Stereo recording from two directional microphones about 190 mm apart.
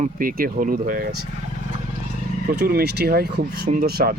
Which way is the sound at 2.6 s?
55° right (ahead or behind).